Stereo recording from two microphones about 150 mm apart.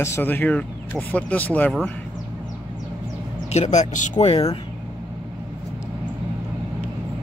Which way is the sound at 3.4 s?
50° left (ahead or behind).